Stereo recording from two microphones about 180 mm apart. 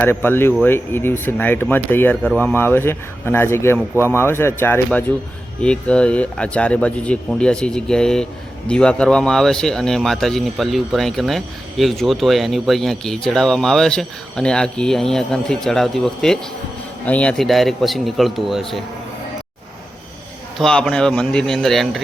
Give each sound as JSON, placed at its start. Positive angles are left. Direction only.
{"t": 0.0, "sound": "speech", "side_deg": 10}
{"t": 20.6, "sound": "speech", "side_deg": 0}